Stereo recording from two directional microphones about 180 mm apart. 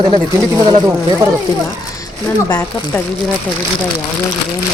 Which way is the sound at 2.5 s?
15° left (ahead or behind).